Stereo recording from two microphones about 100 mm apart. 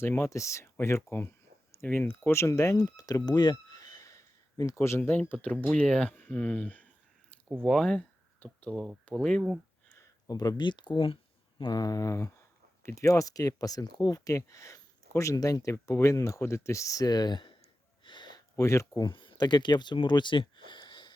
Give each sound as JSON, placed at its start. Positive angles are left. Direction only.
{"t": 0.0, "sound": "speech", "side_deg": 25}
{"t": 7.6, "sound": "speech", "side_deg": 5}
{"t": 8.4, "sound": "a sound", "side_deg": 15}
{"t": 8.7, "sound": "speech", "side_deg": 0}
{"t": 9.9, "sound": "speech", "side_deg": 40}
{"t": 18.5, "sound": "speech", "side_deg": 30}
{"t": 19.0, "sound": "speech", "side_deg": 50}